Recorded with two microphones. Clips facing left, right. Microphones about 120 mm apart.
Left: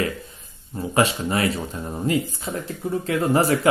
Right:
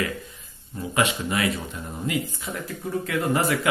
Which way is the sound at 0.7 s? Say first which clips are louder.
Left 4 dB; 35° left (ahead or behind).